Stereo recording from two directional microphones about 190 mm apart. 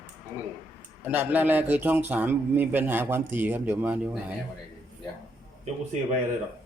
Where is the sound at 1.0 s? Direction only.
10° right (ahead or behind).